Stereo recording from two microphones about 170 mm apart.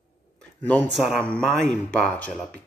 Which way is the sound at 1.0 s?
5° left (ahead or behind).